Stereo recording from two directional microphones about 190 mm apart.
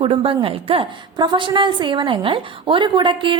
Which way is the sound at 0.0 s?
30° right (ahead or behind).